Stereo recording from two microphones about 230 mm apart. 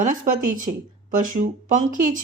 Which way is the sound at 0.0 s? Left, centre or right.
Right.